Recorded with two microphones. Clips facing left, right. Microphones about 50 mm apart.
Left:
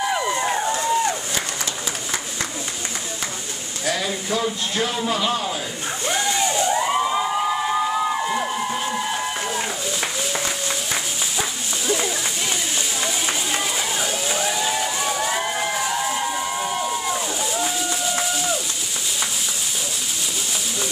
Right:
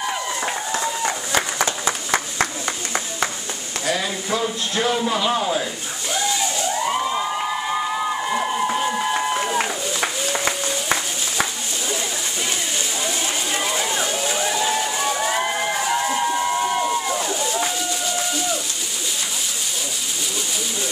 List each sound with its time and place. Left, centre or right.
0.1 s run: centre
1.6 s applause: right
3.8 s speech: centre
6.5 s emergency vehicle: centre
6.9 s crowd: centre
8.9 s a sound: centre
13.0 s a sound: centre
17.1 s slosh: centre
17.6 s a sound: centre